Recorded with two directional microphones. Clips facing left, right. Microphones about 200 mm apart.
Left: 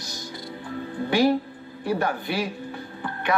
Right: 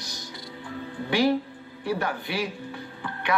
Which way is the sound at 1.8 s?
45° left (ahead or behind).